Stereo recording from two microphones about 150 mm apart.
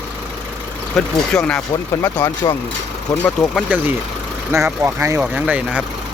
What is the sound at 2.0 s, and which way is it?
Speech, 20° left (ahead or behind).